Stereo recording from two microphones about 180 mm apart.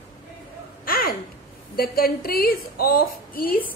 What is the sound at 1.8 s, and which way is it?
A woman's voice, 55° left (ahead or behind).